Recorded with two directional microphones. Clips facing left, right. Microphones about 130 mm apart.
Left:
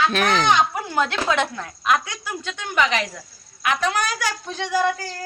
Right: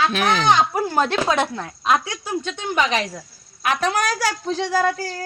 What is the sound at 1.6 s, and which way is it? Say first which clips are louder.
Speech: right 1 dB; 25° right (ahead or behind).